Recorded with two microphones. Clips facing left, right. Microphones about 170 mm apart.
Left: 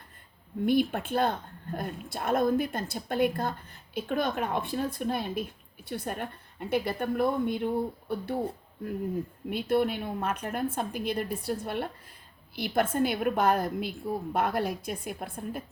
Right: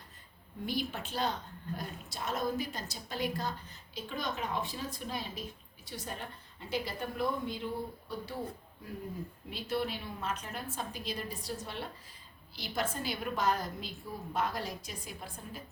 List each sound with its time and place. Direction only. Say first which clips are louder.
0.6 s a woman's voice: left 11 dB; 55° left (ahead or behind)
9.5 s a woman's voice: left 9 dB; 55° left (ahead or behind)